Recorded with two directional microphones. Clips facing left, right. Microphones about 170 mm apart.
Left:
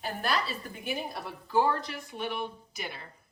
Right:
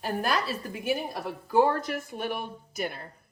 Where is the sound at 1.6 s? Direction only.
45° right (ahead or behind).